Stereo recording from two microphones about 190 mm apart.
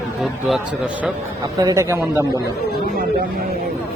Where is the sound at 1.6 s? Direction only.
15° right (ahead or behind).